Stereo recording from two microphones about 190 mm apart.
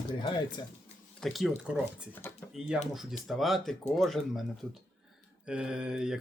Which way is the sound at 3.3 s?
Centre (ahead or behind).